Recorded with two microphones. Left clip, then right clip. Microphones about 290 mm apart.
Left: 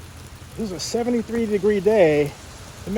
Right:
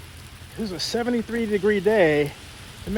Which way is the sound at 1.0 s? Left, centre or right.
Right.